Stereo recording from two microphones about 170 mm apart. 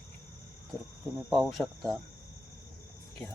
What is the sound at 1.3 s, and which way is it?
Speech, centre (ahead or behind).